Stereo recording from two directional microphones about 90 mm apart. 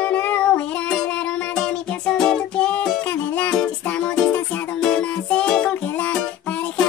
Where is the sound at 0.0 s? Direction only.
15° left (ahead or behind).